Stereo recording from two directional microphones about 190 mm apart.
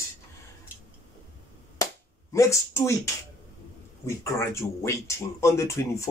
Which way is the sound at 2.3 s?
15° left (ahead or behind).